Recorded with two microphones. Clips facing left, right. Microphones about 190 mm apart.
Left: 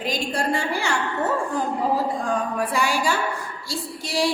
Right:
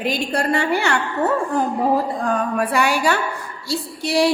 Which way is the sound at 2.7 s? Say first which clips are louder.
Right 4 dB; 65° right (ahead or behind).